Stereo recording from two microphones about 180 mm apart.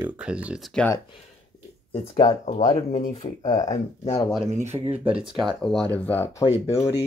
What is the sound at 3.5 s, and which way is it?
Speech, 20° left (ahead or behind).